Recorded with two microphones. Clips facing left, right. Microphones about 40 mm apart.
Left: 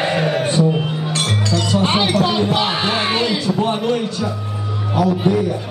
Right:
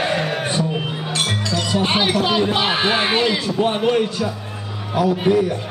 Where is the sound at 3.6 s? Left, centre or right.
Right.